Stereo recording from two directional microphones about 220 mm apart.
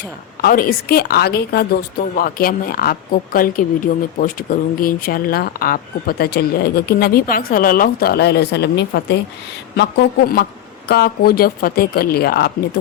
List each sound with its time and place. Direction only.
0.4 s speech: 40° left (ahead or behind)